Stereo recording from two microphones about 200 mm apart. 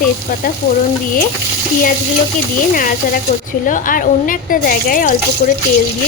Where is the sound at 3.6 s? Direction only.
40° left (ahead or behind).